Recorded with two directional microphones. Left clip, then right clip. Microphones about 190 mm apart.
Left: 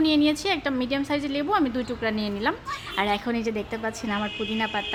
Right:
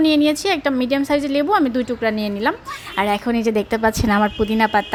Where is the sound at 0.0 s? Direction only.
35° right (ahead or behind).